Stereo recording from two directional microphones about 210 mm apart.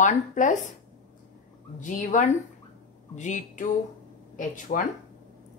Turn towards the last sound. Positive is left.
turn(degrees=40)  # may be behind; listen again after turning